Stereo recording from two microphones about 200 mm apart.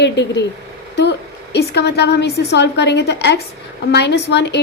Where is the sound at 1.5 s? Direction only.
55° left (ahead or behind).